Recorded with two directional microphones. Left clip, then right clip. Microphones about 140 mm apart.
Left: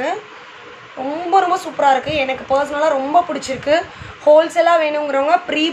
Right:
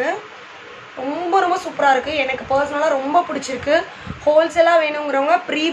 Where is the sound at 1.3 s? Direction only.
25° left (ahead or behind).